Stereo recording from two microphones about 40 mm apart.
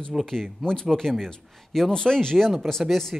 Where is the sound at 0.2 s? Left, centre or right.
Centre.